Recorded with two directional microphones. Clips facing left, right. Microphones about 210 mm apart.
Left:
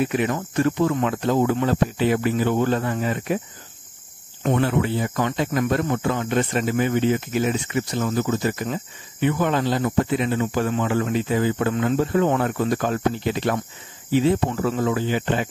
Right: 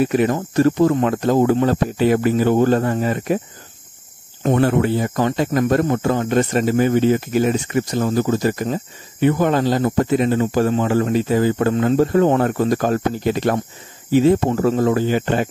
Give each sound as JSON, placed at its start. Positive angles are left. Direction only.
{"t": 0.0, "sound": "speech", "side_deg": -40}
{"t": 4.4, "sound": "speech", "side_deg": -40}